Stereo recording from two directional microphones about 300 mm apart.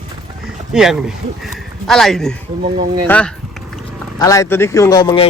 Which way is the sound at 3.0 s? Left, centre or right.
Centre.